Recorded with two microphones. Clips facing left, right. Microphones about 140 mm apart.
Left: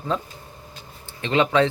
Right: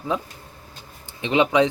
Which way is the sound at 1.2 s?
15° right (ahead or behind).